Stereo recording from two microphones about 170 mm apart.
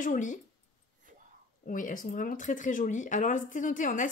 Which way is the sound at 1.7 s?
55° left (ahead or behind).